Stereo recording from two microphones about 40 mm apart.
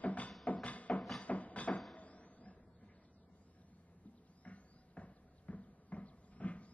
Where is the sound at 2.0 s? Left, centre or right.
Left.